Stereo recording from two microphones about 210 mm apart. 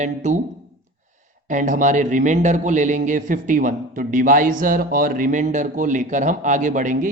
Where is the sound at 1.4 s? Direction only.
40° right (ahead or behind).